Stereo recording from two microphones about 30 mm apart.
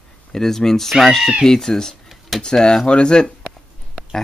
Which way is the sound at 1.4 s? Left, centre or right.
Centre.